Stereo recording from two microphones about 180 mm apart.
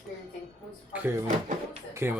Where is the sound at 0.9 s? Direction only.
10° right (ahead or behind).